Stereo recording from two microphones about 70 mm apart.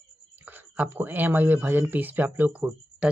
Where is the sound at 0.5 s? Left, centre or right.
Right.